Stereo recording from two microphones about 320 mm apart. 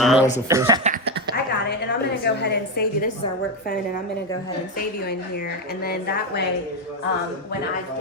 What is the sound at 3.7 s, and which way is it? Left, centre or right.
A woman's voice, left.